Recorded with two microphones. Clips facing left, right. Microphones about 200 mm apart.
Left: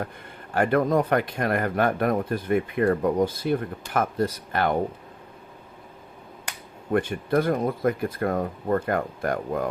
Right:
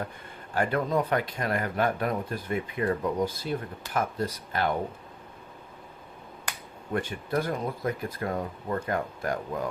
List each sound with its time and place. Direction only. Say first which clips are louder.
0.5 s speech: left 5 dB; 55° left (ahead or behind)
6.9 s speech: left 6 dB; 55° left (ahead or behind)